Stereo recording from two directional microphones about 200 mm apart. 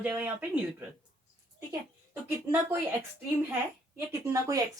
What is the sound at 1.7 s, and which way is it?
A woman's voice, 15° right (ahead or behind).